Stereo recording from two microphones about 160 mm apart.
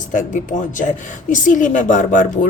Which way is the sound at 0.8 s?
50° left (ahead or behind).